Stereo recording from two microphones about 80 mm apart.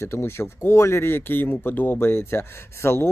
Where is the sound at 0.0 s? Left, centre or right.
Left.